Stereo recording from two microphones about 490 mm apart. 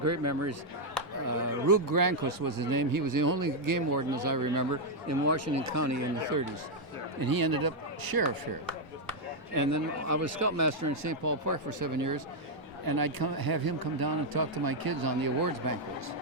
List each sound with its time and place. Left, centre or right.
0.0 s speech: right
9.5 s speech: right